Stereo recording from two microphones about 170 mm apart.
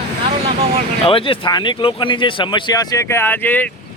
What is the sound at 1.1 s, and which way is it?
Speech, 30° left (ahead or behind).